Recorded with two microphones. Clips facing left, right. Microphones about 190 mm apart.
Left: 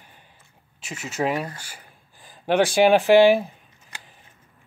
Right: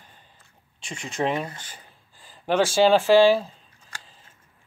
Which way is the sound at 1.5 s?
10° left (ahead or behind).